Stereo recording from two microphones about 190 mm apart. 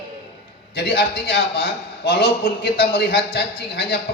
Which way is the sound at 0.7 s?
60° left (ahead or behind).